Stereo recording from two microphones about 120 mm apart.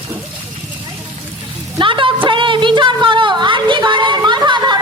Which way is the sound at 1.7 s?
45° right (ahead or behind).